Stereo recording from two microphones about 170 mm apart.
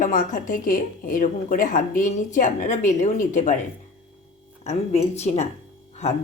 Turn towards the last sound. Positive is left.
turn(degrees=40)  # may be behind; listen again after turning